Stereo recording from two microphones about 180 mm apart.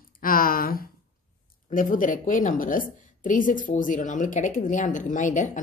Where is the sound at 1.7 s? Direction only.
50° left (ahead or behind).